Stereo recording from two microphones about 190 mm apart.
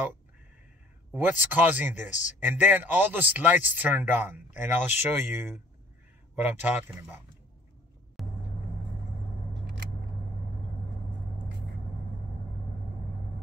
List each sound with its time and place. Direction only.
1.1 s speech: 10° right (ahead or behind)
2.0 s speech: 40° left (ahead or behind)
2.4 s speech: 10° right (ahead or behind)
8.2 s vehicle: centre (ahead or behind)